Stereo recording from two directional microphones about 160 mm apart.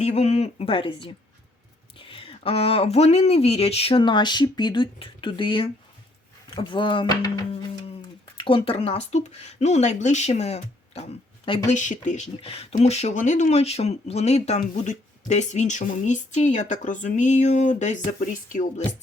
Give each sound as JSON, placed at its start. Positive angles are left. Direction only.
{"t": 0.0, "sound": "speech", "side_deg": 40}
{"t": 8.4, "sound": "speech", "side_deg": 35}